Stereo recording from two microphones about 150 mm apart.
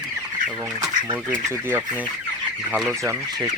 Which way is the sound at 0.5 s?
20° right (ahead or behind).